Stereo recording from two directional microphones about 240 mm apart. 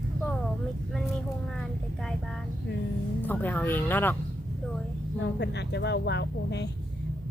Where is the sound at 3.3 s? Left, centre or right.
Centre.